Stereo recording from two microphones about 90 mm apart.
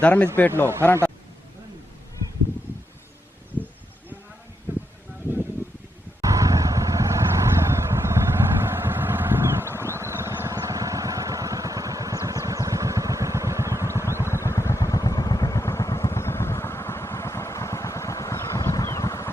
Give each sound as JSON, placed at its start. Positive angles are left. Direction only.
{"t": 0.0, "sound": "speech", "side_deg": 15}
{"t": 4.7, "sound": "a sound", "side_deg": -25}
{"t": 6.2, "sound": "vehicle", "side_deg": -40}
{"t": 14.4, "sound": "vehicle", "side_deg": 30}